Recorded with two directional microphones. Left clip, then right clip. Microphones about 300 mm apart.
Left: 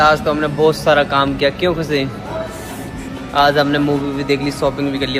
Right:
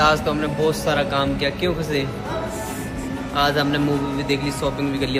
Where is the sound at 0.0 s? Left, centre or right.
Centre.